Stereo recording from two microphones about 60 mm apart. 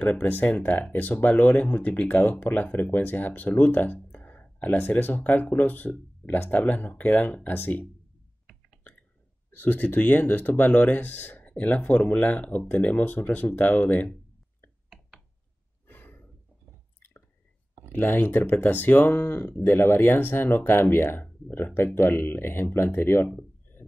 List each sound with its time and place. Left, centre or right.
0.0 s speech: left
9.5 s speech: left
15.9 s a sound: left
17.9 s speech: left